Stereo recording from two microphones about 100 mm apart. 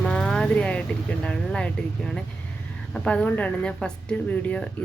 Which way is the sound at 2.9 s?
10° left (ahead or behind).